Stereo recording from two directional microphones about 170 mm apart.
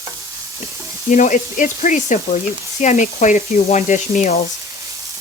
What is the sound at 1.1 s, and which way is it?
Speech, 50° left (ahead or behind).